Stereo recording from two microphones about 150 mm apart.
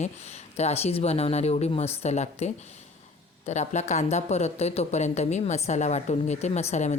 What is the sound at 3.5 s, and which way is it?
Speech, 50° left (ahead or behind).